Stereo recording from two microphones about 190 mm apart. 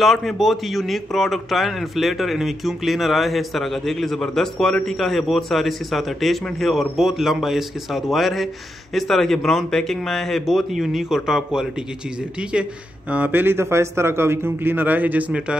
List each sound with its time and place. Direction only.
0.0 s a man's voice: centre (ahead or behind)
13.1 s a man's voice: 10° right (ahead or behind)